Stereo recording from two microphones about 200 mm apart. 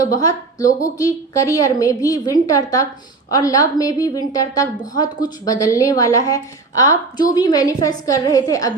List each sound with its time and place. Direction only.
0.1 s a woman's voice: 15° left (ahead or behind)